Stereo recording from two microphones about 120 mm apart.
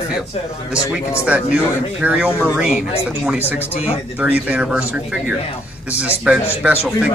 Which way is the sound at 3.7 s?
65° left (ahead or behind).